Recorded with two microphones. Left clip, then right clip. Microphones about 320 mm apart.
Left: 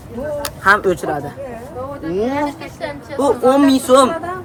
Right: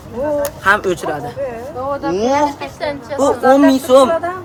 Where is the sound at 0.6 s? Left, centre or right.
Centre.